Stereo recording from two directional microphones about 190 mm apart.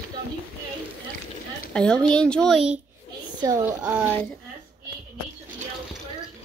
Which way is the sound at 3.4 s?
15° right (ahead or behind).